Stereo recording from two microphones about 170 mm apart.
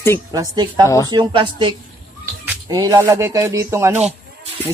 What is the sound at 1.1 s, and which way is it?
Speech, 30° right (ahead or behind).